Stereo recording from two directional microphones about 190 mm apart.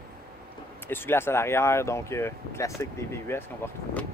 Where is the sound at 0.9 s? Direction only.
10° left (ahead or behind).